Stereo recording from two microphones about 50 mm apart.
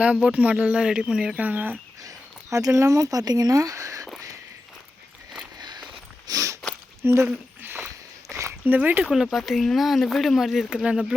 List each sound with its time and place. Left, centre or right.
0.0 s speech: right
1.4 s speech: right
2.5 s speech: right
6.3 s a sound: right
7.0 s speech: right
7.6 s a sound: right
8.3 s a sound: right
8.6 s speech: right
9.0 s speech: centre